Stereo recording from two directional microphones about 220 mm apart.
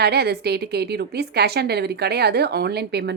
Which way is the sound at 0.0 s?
45° right (ahead or behind).